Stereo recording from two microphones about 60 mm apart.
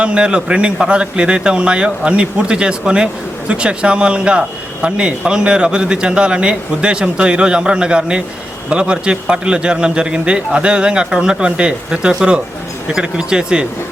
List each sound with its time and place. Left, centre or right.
0.0 s a man's voice: centre